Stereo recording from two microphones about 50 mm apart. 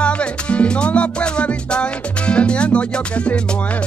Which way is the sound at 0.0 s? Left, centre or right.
Left.